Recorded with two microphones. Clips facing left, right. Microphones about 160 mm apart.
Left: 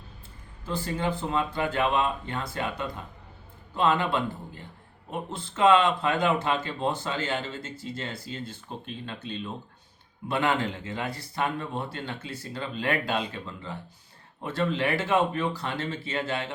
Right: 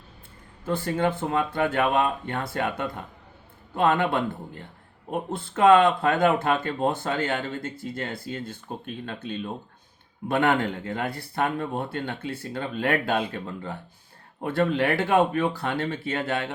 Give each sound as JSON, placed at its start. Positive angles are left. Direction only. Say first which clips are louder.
{"t": 0.6, "sound": "speech", "louder": "right 5 dB", "side_deg": -55}